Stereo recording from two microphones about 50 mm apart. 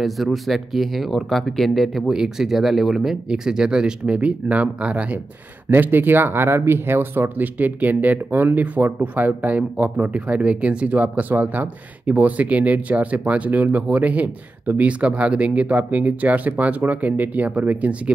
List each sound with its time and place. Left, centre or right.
0.0 s speech: centre
2.0 s speech: centre
5.7 s speech: right